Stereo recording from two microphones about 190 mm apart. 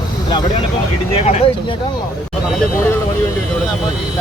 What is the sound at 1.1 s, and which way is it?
Speech, 35° left (ahead or behind).